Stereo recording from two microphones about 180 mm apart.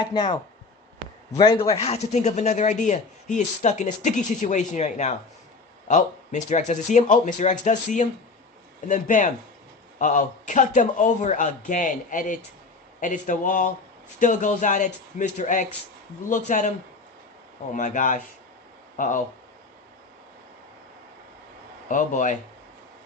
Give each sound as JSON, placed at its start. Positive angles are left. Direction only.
{"t": 0.0, "sound": "a man's voice", "side_deg": 25}
{"t": 17.7, "sound": "speech", "side_deg": 45}
{"t": 21.8, "sound": "speech", "side_deg": 45}